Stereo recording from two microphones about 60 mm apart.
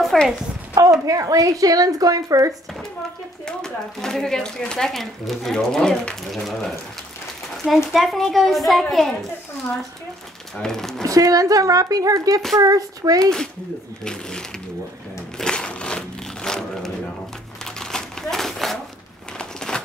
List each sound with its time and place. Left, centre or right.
0.1 s a woman's voice: centre
1.0 s speech: right
3.4 s a woman's voice: centre
10.5 s speech: centre
11.0 s speech: right
12.5 s speech: right
15.3 s a sound: centre
16.4 s shuffling cards: centre
17.7 s a sound: centre